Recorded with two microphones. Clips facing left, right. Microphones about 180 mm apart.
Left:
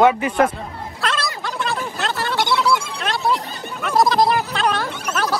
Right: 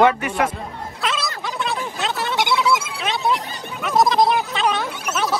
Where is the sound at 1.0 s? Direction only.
Centre (ahead or behind).